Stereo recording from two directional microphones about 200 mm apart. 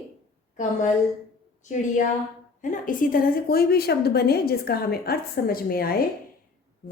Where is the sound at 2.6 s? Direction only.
40° left (ahead or behind).